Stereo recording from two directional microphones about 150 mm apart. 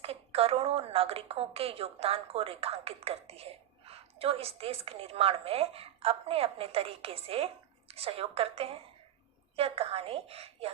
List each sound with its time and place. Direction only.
0.0 s a woman's voice: 40° right (ahead or behind)